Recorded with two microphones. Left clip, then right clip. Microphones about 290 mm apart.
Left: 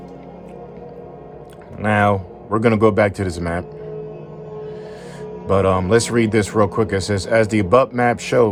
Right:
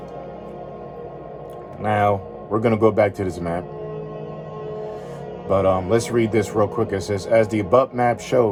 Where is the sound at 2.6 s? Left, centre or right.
Left.